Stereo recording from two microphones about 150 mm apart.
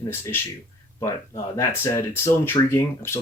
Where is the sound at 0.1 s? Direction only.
15° left (ahead or behind).